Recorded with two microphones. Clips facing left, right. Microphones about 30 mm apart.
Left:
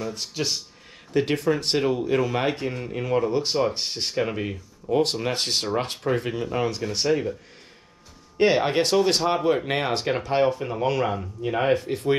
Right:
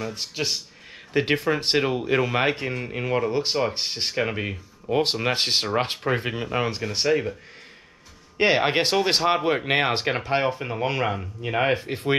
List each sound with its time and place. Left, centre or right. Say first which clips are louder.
0.0 s speech: even; centre
1.1 s speech: even; right
8.4 s speech: even; right